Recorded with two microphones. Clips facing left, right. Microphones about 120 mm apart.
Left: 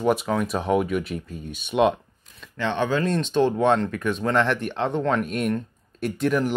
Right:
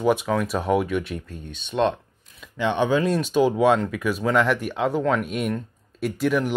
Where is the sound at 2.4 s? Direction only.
15° right (ahead or behind).